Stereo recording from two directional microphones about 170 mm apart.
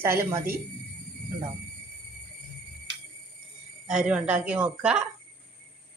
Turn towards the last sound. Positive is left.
turn(degrees=-5)  # may be behind; listen again after turning